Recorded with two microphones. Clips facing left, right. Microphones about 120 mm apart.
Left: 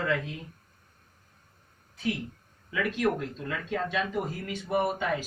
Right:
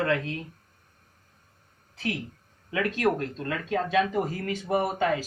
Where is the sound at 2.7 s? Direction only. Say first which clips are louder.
Right 2 dB; 90° right.